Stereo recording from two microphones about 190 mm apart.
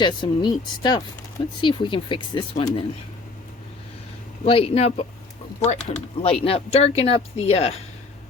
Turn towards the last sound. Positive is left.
turn(degrees=35)  # may be behind; listen again after turning